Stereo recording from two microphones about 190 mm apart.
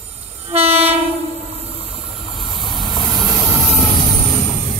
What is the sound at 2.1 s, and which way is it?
Vehicle, centre (ahead or behind).